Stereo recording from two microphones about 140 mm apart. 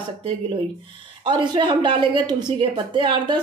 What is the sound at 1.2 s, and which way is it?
Speech, 35° right (ahead or behind).